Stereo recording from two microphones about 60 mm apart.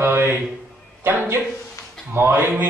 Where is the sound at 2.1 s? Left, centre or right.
Right.